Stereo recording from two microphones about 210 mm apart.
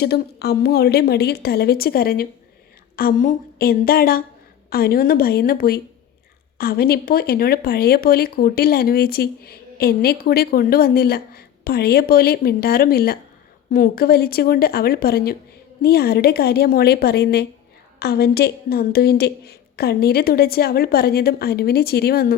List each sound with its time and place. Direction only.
0.0 s speech: 50° left (ahead or behind)